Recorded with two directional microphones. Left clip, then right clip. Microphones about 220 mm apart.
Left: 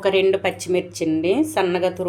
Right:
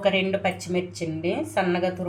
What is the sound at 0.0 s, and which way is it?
A woman's voice, 45° left (ahead or behind).